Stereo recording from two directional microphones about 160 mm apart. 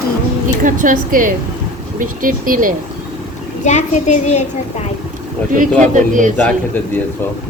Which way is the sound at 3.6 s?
50° left (ahead or behind).